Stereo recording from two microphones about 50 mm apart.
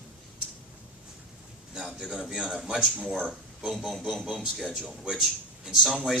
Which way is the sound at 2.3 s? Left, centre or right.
Centre.